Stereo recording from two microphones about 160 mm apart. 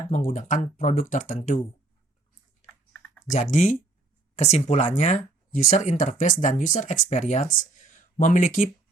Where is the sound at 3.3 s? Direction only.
50° left (ahead or behind).